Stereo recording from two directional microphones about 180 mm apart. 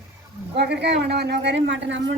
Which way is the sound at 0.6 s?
70° right (ahead or behind).